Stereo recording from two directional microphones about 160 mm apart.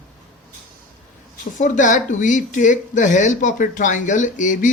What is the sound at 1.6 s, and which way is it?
Speech, 50° left (ahead or behind).